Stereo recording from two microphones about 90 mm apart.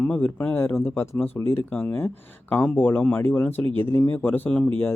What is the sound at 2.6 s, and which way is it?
Speech, 20° left (ahead or behind).